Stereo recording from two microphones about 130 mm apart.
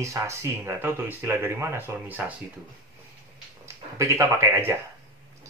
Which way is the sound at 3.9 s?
25° right (ahead or behind).